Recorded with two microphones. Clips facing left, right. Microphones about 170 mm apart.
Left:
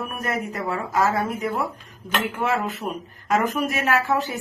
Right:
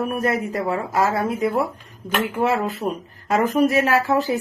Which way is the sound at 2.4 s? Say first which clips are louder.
Right 4 dB; 30° right (ahead or behind).